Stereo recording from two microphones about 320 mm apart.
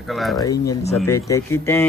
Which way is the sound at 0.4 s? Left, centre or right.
Centre.